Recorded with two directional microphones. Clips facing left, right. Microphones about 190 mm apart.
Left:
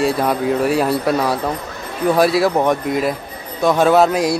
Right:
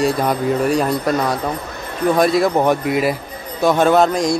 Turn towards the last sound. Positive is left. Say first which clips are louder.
# left 1 dB
turn(degrees=5)  # may be behind; listen again after turning